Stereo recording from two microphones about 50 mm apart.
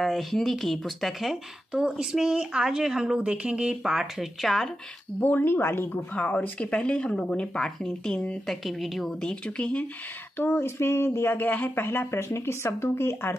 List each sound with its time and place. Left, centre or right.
0.0 s speech: centre
1.7 s speech: centre
3.8 s speech: centre
5.2 s speech: left
5.6 s speech: left
5.9 s speech: left
6.6 s speech: left
8.5 s speech: centre
9.2 s speech: centre
10.3 s speech: left
11.3 s speech: left